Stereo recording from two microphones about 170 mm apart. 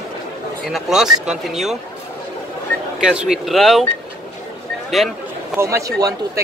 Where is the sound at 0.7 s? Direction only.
Centre (ahead or behind).